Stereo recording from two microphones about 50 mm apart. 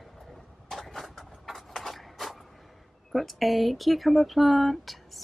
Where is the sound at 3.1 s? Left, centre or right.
Centre.